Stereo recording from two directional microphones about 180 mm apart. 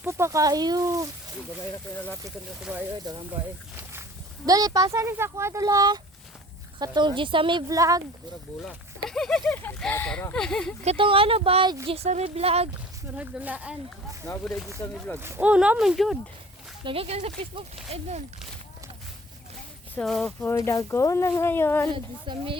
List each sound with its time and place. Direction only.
0.0 s speech: 15° right (ahead or behind)
2.6 s speech: 5° right (ahead or behind)
4.4 s speech: 20° right (ahead or behind)
8.6 s speech: centre (ahead or behind)
10.8 s speech: 30° right (ahead or behind)
11.9 s speech: 35° right (ahead or behind)
13.1 s speech: 10° right (ahead or behind)
15.1 s speech: 15° right (ahead or behind)
16.8 s speech: 30° right (ahead or behind)
20.0 s speech: 5° left (ahead or behind)
20.5 s speech: 15° left (ahead or behind)
21.9 s speech: 30° right (ahead or behind)